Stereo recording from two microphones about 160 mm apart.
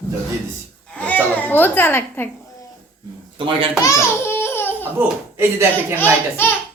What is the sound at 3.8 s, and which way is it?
Babbling, 15° left (ahead or behind).